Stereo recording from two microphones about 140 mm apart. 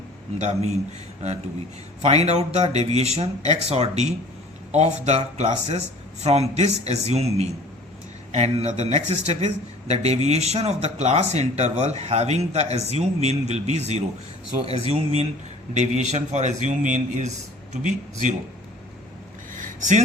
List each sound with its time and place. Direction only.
0.3 s a man's voice: 55° right (ahead or behind)
2.0 s speech: 45° right (ahead or behind)
15.7 s a man's voice: 55° right (ahead or behind)
19.5 s a sound: 65° right (ahead or behind)